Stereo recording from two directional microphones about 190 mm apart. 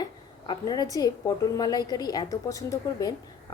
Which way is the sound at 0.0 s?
20° left (ahead or behind).